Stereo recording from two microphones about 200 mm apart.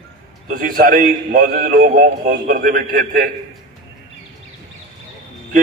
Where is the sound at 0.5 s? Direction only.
45° right (ahead or behind).